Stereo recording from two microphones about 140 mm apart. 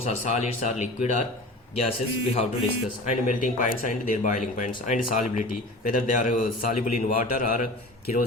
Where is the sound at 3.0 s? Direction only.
65° left (ahead or behind).